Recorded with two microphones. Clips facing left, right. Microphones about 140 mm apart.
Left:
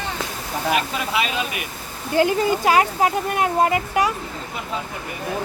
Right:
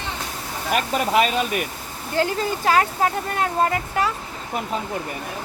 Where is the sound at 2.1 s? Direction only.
15° left (ahead or behind).